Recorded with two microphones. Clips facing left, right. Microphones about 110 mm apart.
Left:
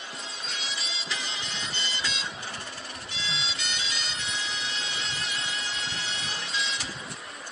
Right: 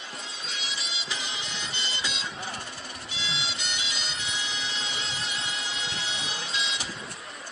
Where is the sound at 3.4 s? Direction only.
Centre (ahead or behind).